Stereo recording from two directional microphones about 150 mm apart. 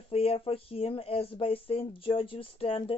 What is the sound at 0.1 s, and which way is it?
Speech, 40° left (ahead or behind).